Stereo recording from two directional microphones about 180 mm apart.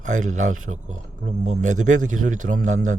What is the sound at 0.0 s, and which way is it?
A man's voice, 45° right (ahead or behind).